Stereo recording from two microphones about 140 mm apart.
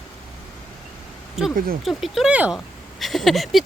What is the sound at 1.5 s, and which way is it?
Speech, 90° right.